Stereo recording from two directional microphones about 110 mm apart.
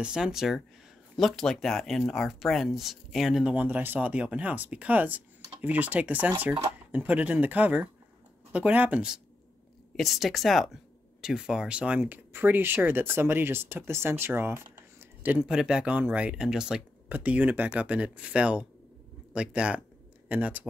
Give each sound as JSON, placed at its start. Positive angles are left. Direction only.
{"t": 0.0, "sound": "speech", "side_deg": -5}
{"t": 15.3, "sound": "speech", "side_deg": -5}